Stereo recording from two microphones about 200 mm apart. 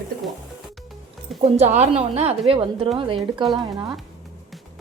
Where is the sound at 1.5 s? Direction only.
35° right (ahead or behind).